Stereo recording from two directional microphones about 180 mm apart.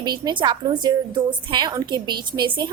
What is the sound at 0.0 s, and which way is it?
A woman's voice, 25° right (ahead or behind).